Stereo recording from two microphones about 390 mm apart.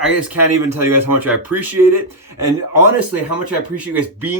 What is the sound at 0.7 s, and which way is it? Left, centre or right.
Speech, centre.